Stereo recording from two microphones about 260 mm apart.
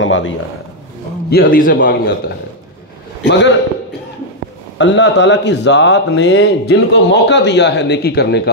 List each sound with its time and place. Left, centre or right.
0.0 s a man's voice: left
1.3 s a man's voice: left
4.7 s speech: left